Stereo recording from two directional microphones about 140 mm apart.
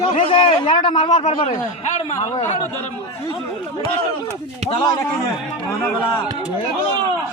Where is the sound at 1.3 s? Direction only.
40° left (ahead or behind).